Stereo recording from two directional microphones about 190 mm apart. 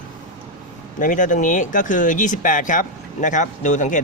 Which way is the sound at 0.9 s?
45° left (ahead or behind).